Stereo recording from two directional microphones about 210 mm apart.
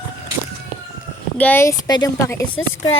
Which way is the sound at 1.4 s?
10° left (ahead or behind).